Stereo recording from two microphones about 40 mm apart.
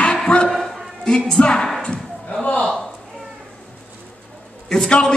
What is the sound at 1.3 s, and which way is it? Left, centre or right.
Speech, left.